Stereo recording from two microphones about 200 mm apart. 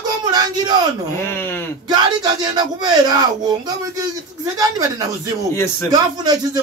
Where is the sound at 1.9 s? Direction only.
20° right (ahead or behind).